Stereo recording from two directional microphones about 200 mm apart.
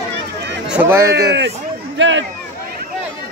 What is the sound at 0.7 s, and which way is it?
Speech, 10° right (ahead or behind).